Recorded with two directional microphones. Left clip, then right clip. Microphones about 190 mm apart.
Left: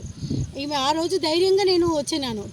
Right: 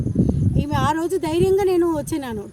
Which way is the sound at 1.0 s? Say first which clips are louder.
Even; 40° right (ahead or behind).